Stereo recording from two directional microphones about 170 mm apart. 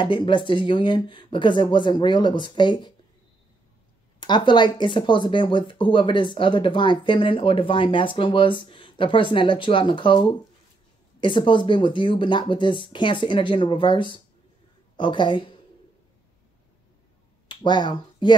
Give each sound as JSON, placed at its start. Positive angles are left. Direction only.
{"t": 0.0, "sound": "speech", "side_deg": 30}
{"t": 4.2, "sound": "speech", "side_deg": 25}
{"t": 17.5, "sound": "speech", "side_deg": 25}